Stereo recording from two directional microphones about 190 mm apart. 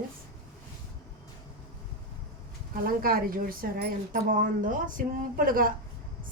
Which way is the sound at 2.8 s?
50° right (ahead or behind).